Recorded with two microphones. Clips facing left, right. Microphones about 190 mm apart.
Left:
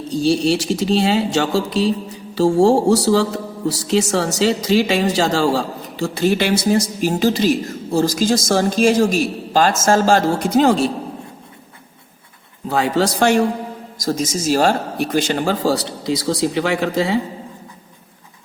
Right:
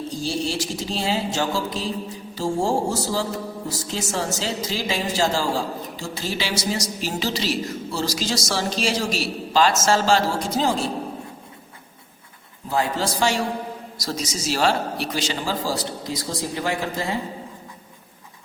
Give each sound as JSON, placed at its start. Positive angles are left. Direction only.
{"t": 0.1, "sound": "a man's voice", "side_deg": 70}
{"t": 12.6, "sound": "speech", "side_deg": 70}
{"t": 14.0, "sound": "speech", "side_deg": 50}